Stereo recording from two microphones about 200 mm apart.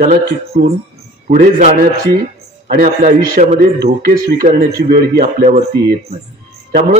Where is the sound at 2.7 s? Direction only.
40° right (ahead or behind).